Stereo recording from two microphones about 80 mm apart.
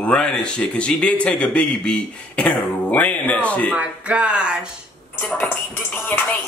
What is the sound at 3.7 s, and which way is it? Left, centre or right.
Speech, centre.